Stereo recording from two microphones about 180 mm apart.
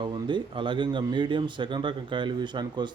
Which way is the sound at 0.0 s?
25° right (ahead or behind).